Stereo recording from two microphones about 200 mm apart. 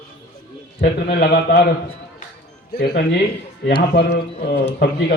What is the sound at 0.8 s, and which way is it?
Speech, 55° left (ahead or behind).